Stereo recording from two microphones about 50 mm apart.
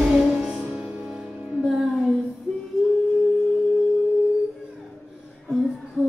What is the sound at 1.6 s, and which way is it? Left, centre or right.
Music, centre.